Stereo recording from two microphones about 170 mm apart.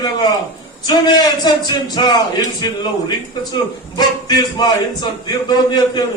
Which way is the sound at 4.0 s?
25° left (ahead or behind).